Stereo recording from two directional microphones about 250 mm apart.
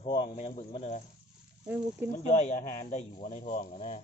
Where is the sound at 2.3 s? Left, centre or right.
Left.